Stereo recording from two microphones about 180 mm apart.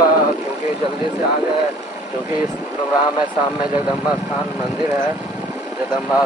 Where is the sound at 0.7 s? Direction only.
20° right (ahead or behind).